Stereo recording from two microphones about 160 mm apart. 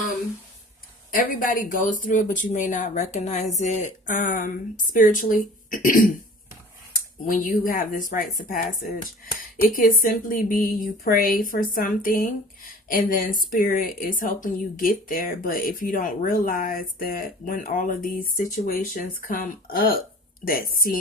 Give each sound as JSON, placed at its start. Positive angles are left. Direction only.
{"t": 1.1, "sound": "speech", "side_deg": 60}
{"t": 7.3, "sound": "speech", "side_deg": 55}